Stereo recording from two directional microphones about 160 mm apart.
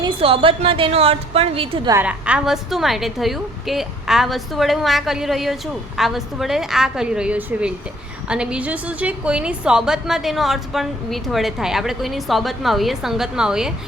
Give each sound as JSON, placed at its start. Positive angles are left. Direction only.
{"t": 0.0, "sound": "a woman's voice", "side_deg": -35}
{"t": 1.9, "sound": "a woman's voice", "side_deg": -10}